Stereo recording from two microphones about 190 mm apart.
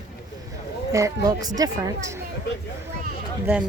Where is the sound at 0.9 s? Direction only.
20° right (ahead or behind).